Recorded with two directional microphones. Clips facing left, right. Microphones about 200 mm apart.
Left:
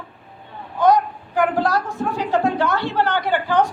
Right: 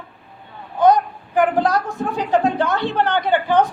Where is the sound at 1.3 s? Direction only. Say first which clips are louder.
Right 2 dB; 20° right (ahead or behind).